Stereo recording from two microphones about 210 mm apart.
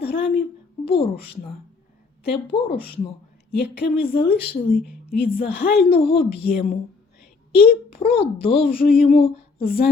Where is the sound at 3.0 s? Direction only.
50° left (ahead or behind).